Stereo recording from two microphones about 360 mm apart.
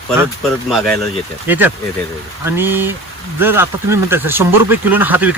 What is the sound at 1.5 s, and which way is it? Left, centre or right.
Speech, centre.